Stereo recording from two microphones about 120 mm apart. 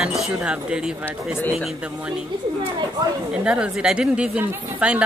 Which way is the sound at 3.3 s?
10° right (ahead or behind).